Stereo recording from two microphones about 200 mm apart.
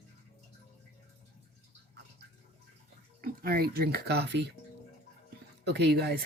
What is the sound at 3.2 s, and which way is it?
Speech, 45° right (ahead or behind).